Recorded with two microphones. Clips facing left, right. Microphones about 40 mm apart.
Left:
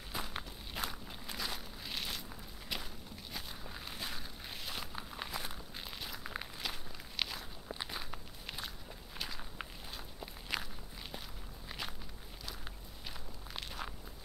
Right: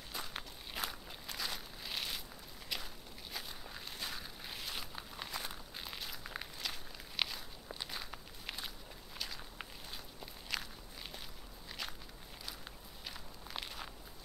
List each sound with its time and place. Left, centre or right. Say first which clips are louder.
0.1 s walk: left 3 dB; centre
13.0 s walk: left 1 dB; centre